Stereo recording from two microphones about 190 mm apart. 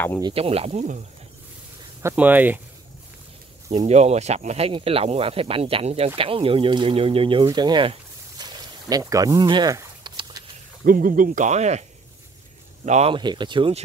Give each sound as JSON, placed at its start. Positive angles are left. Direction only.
{"t": 0.2, "sound": "speech", "side_deg": -30}
{"t": 2.0, "sound": "speech", "side_deg": -10}
{"t": 3.8, "sound": "speech", "side_deg": -35}
{"t": 10.9, "sound": "speech", "side_deg": -45}
{"t": 12.8, "sound": "speech", "side_deg": -35}
{"t": 13.1, "sound": "speech", "side_deg": -25}